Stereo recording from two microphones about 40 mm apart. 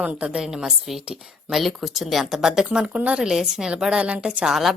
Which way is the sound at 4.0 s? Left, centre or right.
Right.